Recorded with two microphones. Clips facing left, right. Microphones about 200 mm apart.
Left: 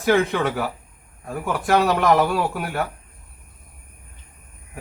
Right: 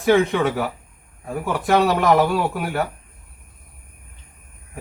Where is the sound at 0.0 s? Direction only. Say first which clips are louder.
Right 2 dB; centre (ahead or behind).